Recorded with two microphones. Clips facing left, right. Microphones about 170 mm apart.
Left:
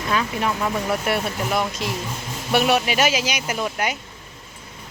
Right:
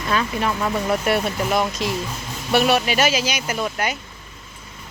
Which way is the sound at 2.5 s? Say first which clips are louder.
Right 1 dB; 10° left (ahead or behind).